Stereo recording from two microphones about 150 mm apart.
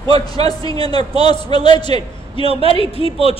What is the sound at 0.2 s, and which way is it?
A man's voice, 25° left (ahead or behind).